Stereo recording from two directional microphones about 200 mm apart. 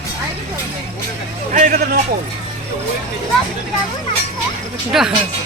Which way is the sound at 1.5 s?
45° right (ahead or behind).